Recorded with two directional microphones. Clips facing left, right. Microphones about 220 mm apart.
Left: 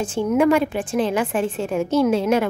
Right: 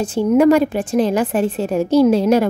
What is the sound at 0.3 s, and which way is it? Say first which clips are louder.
A woman's voice: right 5 dB; 40° right (ahead or behind).